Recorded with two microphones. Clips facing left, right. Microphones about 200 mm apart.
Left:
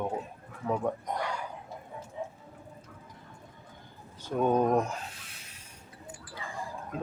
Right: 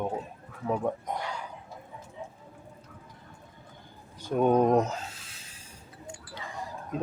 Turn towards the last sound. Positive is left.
turn(degrees=-20)  # may be behind; listen again after turning